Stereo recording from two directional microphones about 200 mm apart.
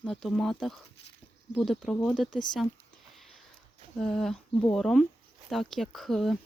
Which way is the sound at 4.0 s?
Centre (ahead or behind).